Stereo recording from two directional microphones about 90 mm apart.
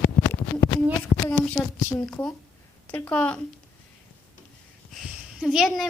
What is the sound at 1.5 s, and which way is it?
A woman's voice, 15° left (ahead or behind).